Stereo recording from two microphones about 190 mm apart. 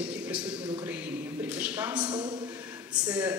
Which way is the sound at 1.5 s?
10° right (ahead or behind).